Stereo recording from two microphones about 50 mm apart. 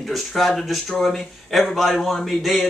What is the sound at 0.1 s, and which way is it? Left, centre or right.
A man's voice, centre.